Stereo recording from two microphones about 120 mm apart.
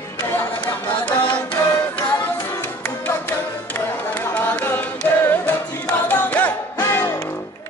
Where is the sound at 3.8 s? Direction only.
15° left (ahead or behind).